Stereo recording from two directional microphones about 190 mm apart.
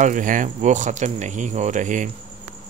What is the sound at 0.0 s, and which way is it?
Speech, 40° right (ahead or behind).